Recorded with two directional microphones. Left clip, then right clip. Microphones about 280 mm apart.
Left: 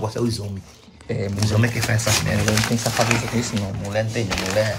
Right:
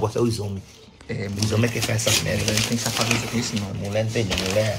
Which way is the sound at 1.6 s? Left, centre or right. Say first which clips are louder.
Left 1 dB; left.